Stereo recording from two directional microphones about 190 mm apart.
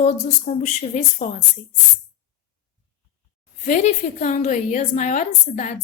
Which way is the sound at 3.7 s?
40° left (ahead or behind).